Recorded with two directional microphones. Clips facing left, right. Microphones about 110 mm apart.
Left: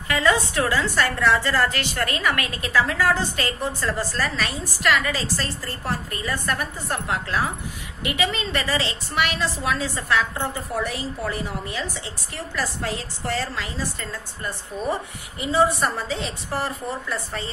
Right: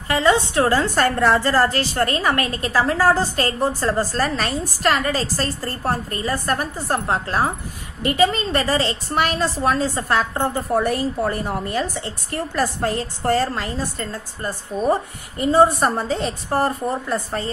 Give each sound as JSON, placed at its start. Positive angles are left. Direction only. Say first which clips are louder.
{"t": 0.1, "sound": "a woman's voice", "louder": "right 4 dB", "side_deg": -30}
{"t": 0.7, "sound": "a woman's voice", "louder": "right 4 dB", "side_deg": -45}